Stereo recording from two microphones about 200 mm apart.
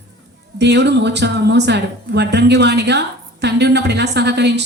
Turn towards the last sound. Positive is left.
turn(degrees=-60)  # may be behind; listen again after turning